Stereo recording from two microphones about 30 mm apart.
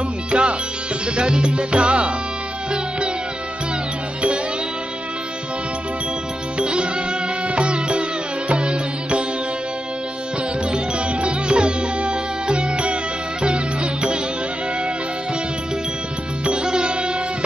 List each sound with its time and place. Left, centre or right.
0.3 s music: right
6.7 s music: right
10.7 s music: right
16.5 s music: right